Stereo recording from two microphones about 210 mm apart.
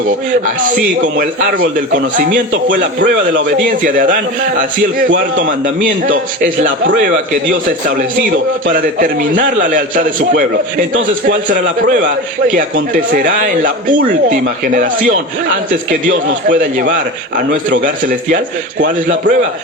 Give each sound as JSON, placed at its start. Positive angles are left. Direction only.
{"t": 1.0, "sound": "a man's voice", "side_deg": -45}
{"t": 7.9, "sound": "a man's voice", "side_deg": -40}
{"t": 15.7, "sound": "a man's voice", "side_deg": -40}